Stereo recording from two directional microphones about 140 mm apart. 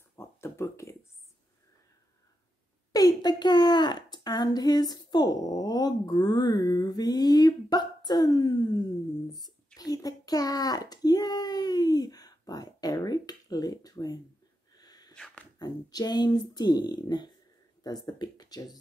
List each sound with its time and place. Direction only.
0.1 s a sound: 20° left (ahead or behind)
2.9 s a woman's voice: 30° left (ahead or behind)
9.3 s a sound: centre (ahead or behind)
9.8 s a child's voice: 25° left (ahead or behind)
14.8 s sneeze: 30° left (ahead or behind)
15.1 s beatboxing: 5° left (ahead or behind)
15.6 s a woman's voice: 30° left (ahead or behind)